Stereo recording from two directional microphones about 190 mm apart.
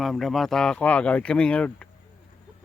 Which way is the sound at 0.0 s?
Centre (ahead or behind).